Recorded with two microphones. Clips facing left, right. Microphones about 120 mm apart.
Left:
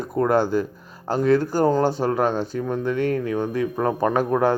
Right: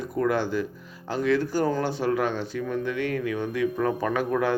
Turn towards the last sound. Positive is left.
turn(degrees=35)  # may be behind; listen again after turning